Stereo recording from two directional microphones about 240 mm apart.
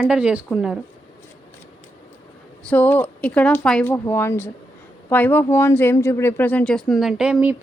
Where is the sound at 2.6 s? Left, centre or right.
Centre.